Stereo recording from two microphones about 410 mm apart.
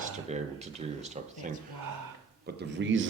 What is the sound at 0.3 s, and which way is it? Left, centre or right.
Speech, centre.